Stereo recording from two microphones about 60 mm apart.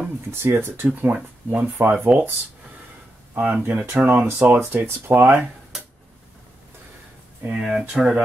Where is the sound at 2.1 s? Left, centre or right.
Centre.